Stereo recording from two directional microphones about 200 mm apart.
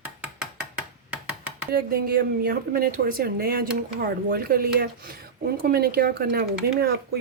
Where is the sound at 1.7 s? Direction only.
50° right (ahead or behind).